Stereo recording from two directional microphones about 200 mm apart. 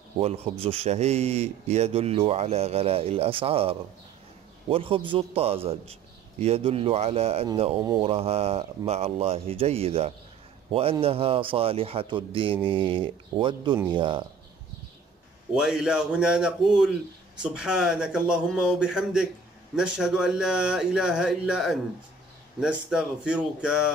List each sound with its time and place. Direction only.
0.2 s a man's voice: 30° right (ahead or behind)
15.5 s speech: 5° right (ahead or behind)